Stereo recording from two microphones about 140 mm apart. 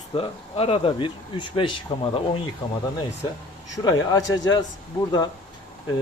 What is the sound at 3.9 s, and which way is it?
Speech, 25° left (ahead or behind).